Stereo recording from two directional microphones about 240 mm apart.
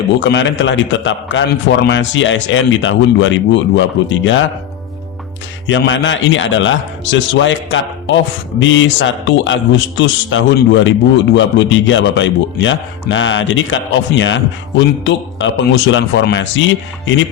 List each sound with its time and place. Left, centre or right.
0.2 s speech: left
5.6 s speech: left